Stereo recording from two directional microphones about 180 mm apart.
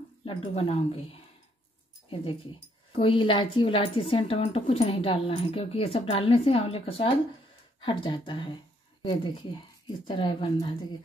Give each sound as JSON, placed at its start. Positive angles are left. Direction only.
{"t": 0.2, "sound": "speech", "side_deg": 30}
{"t": 3.0, "sound": "a woman's voice", "side_deg": 30}